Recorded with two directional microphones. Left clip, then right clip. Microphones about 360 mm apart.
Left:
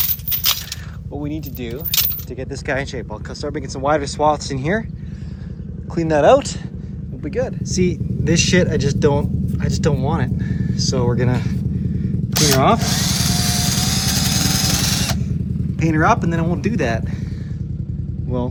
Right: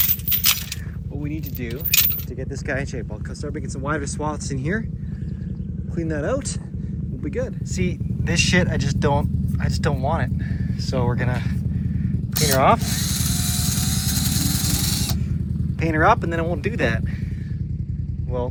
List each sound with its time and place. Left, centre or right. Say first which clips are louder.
1.2 s speech: left 3 dB; centre
5.9 s speech: left 12 dB; centre
12.4 s music: left 2 dB; centre
15.8 s speech: left 1 dB; centre